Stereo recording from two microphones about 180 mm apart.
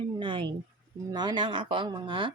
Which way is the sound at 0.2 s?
25° right (ahead or behind).